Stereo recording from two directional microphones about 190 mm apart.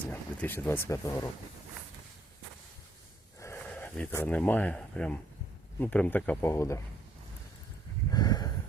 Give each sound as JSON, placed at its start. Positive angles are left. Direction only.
{"t": 0.1, "sound": "speech", "side_deg": 10}
{"t": 3.7, "sound": "speech", "side_deg": 5}
{"t": 8.1, "sound": "a sound", "side_deg": 20}